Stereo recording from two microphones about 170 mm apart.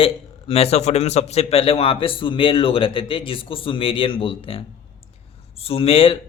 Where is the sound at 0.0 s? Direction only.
35° left (ahead or behind).